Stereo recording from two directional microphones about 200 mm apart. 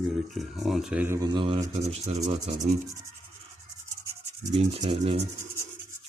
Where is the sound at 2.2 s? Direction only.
35° right (ahead or behind).